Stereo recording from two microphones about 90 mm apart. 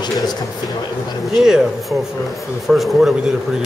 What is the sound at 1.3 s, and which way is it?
Speech, 5° right (ahead or behind).